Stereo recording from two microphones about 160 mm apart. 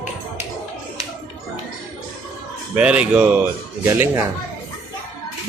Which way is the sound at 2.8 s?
5° right (ahead or behind).